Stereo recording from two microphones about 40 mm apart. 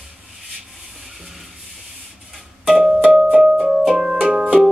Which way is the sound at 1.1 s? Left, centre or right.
Centre.